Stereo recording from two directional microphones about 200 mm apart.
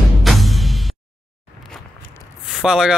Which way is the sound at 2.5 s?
5° right (ahead or behind).